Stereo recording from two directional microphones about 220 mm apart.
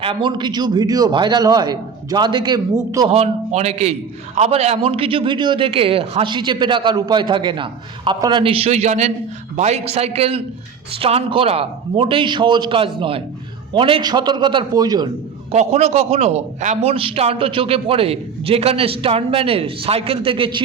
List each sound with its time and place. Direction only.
0.0 s a man's voice: 25° right (ahead or behind)
3.1 s a man's voice: 30° right (ahead or behind)
15.5 s a man's voice: 30° right (ahead or behind)